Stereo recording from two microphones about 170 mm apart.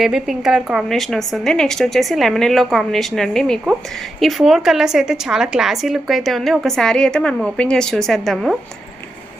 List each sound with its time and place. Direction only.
0.0 s a woman's voice: 5° right (ahead or behind)